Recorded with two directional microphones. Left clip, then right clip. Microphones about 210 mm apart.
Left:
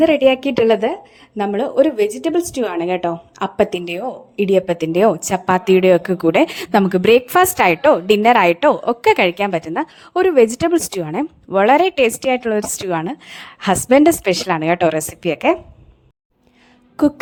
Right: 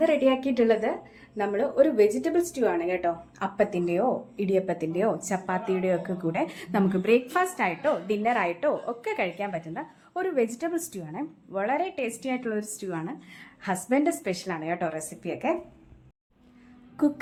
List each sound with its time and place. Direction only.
0.0 s a woman's voice: 40° left (ahead or behind)
17.0 s a woman's voice: 40° left (ahead or behind)